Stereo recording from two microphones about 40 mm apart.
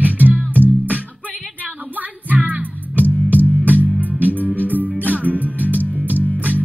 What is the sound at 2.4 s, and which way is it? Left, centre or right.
Music, right.